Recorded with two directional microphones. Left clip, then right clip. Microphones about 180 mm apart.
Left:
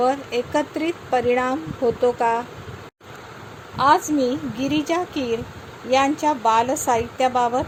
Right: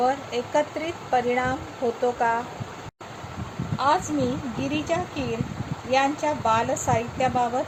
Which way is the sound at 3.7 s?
60° left (ahead or behind).